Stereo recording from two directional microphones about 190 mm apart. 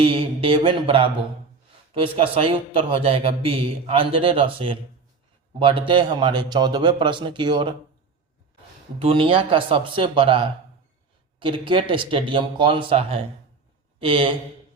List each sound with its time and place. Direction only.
0.0 s a man's voice: 30° right (ahead or behind)
9.0 s a man's voice: 30° right (ahead or behind)